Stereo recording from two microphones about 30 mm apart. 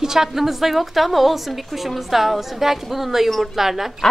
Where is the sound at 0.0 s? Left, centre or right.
Centre.